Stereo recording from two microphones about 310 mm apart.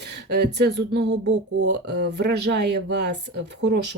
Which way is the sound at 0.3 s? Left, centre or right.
Right.